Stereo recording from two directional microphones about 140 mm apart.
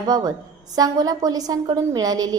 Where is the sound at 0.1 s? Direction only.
30° right (ahead or behind).